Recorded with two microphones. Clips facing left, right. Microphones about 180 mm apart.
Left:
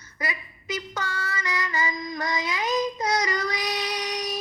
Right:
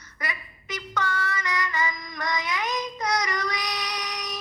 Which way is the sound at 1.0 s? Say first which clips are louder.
Right 3 dB; 25° left (ahead or behind).